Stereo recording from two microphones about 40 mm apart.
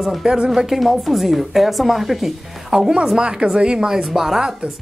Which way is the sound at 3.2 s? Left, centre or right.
Right.